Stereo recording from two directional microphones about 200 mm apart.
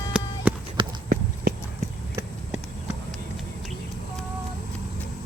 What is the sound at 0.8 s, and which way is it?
Clip-clop, 25° right (ahead or behind).